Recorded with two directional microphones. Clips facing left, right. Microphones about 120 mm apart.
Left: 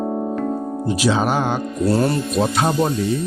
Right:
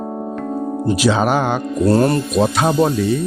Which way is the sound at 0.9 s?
85° right.